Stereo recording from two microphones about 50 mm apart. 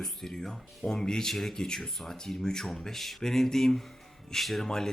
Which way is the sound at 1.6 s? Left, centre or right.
Centre.